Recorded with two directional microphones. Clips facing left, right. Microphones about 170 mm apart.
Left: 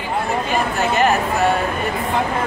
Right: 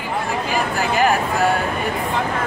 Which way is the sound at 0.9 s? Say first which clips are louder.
Even; centre (ahead or behind).